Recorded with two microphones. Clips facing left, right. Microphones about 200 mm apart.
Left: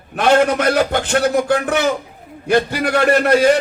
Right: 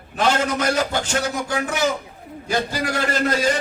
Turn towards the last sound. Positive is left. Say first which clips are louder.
# left 8 dB
turn(degrees=65)  # may be behind; listen again after turning